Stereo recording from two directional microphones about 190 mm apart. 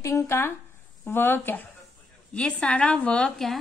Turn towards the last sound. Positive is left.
turn(degrees=5)  # may be behind; listen again after turning